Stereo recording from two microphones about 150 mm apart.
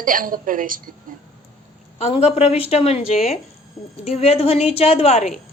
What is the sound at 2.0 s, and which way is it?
A woman's voice, 45° left (ahead or behind).